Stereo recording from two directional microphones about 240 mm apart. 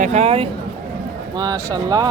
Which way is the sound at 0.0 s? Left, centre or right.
Right.